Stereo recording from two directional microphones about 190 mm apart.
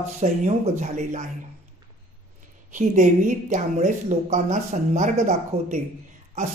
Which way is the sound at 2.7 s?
45° right (ahead or behind).